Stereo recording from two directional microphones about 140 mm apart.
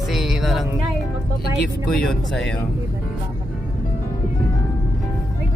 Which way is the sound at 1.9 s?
5° left (ahead or behind).